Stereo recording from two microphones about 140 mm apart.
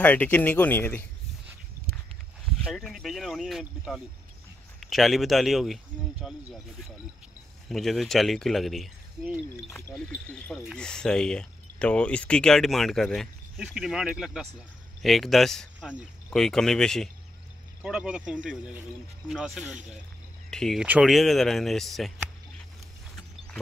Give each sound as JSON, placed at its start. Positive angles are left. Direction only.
{"t": 0.0, "sound": "speech", "side_deg": 10}
{"t": 2.4, "sound": "speech", "side_deg": 5}
{"t": 7.6, "sound": "speech", "side_deg": 0}
{"t": 9.7, "sound": "speech", "side_deg": 20}
{"t": 9.9, "sound": "speech", "side_deg": 5}
{"t": 20.4, "sound": "cricket", "side_deg": 5}
{"t": 20.8, "sound": "speech", "side_deg": -5}